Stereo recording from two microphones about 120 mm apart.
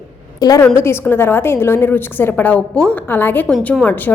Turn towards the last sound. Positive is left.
turn(degrees=15)  # may be behind; listen again after turning